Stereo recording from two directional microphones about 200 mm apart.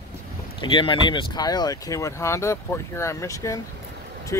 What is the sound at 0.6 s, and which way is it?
Speech, 25° left (ahead or behind).